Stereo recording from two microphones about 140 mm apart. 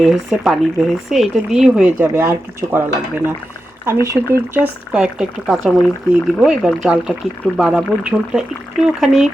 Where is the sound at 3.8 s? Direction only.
20° right (ahead or behind).